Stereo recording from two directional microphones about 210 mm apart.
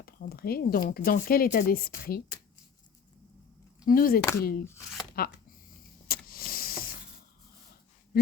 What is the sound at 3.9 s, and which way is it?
Speech, 45° left (ahead or behind).